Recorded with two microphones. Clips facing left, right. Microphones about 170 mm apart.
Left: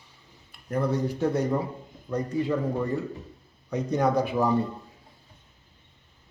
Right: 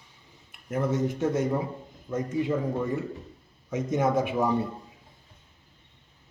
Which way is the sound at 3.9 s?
35° left (ahead or behind).